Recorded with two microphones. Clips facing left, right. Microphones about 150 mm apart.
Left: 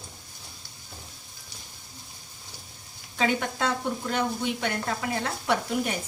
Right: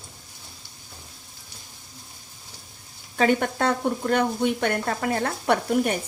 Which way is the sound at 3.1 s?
50° right (ahead or behind).